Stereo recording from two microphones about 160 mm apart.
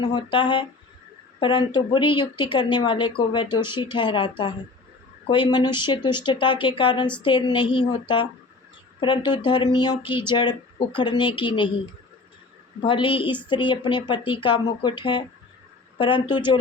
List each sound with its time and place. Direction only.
0.0 s speech: 30° left (ahead or behind)
12.8 s speech: 30° left (ahead or behind)